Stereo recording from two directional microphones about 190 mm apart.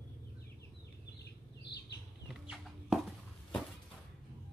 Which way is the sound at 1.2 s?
60° left (ahead or behind).